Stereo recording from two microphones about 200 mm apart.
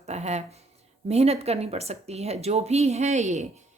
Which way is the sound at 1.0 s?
30° right (ahead or behind).